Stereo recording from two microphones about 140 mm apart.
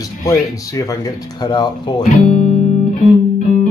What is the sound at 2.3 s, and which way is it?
Music, 50° left (ahead or behind).